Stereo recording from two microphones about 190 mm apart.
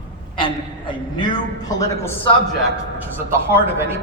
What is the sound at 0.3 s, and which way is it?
A woman's voice, 25° left (ahead or behind).